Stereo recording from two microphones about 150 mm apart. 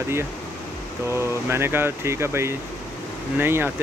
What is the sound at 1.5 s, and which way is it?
Speech, 15° right (ahead or behind).